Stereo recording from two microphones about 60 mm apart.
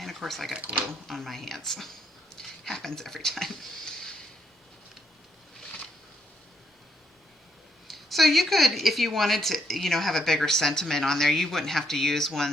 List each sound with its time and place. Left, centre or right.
0.0 s speech: centre
0.6 s speech: right
1.0 s a woman's voice: centre
7.9 s a woman's voice: centre